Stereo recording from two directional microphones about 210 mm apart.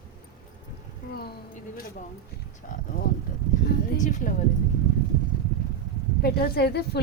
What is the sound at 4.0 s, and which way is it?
Speech, 35° left (ahead or behind).